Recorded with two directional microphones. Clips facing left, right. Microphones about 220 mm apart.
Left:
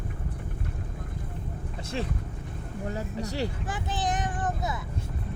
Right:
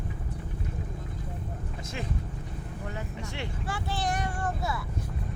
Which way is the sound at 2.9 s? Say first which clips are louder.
Left 7 dB; 35° left (ahead or behind).